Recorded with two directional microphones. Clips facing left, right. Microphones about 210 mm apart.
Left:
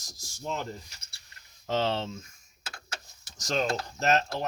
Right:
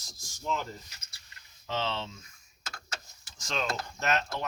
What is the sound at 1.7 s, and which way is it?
Speech, 45° left (ahead or behind).